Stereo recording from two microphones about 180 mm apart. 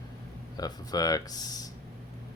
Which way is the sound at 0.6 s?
20° left (ahead or behind).